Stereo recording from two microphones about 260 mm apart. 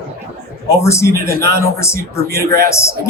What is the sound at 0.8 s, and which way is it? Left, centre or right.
Speech, centre.